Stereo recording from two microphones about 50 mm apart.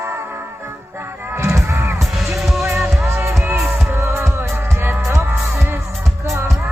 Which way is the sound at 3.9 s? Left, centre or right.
Right.